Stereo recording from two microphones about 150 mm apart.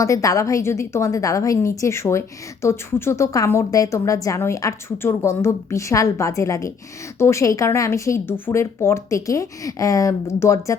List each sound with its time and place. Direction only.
0.0 s a woman's voice: 20° left (ahead or behind)